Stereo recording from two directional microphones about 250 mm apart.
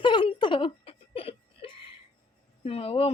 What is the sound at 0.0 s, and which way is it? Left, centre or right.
Giggle, centre.